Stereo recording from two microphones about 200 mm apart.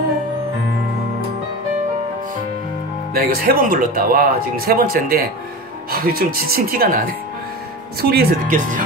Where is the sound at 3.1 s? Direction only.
50° right (ahead or behind).